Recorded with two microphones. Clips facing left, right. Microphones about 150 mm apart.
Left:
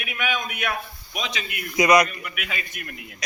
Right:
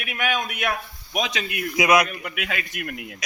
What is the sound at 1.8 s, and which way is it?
Speech, 5° right (ahead or behind).